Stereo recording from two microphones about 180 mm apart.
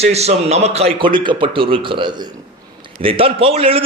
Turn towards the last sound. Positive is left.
turn(degrees=-30)  # may be behind; listen again after turning